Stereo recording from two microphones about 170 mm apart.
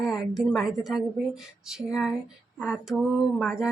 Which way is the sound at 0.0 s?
Centre (ahead or behind).